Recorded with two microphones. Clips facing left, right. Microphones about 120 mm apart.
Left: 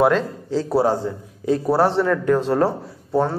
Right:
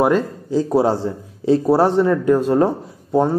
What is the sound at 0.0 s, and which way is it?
A man's voice, 10° right (ahead or behind).